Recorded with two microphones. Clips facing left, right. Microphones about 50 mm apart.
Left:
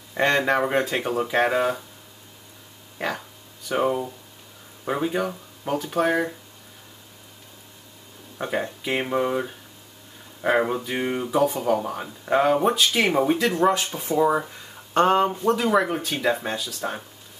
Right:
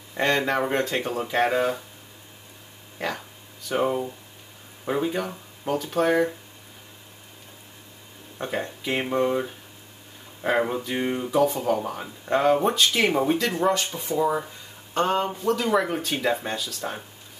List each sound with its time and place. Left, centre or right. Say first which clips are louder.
0.1 s speech: left 2 dB; centre
3.0 s speech: left 2 dB; centre
8.4 s speech: left 2 dB; centre
14.0 s speech: left 4 dB; left
15.5 s speech: left 2 dB; centre